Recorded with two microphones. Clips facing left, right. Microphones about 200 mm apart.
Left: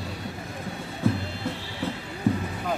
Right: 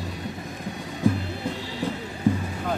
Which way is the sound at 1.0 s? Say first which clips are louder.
Right 2 dB; 15° right (ahead or behind).